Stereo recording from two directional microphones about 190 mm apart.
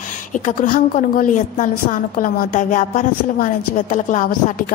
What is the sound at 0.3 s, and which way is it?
A woman's voice, 40° left (ahead or behind).